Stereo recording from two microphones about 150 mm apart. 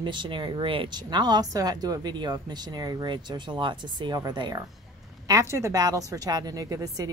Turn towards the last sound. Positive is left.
turn(degrees=-25)  # may be behind; listen again after turning